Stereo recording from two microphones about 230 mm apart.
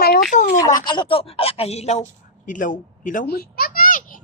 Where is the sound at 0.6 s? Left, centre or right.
Centre.